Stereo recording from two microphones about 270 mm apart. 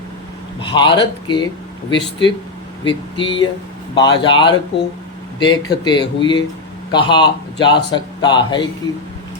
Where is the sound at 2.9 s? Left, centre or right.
Centre.